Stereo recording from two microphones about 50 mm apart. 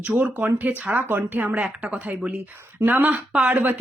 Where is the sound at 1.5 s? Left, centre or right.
Right.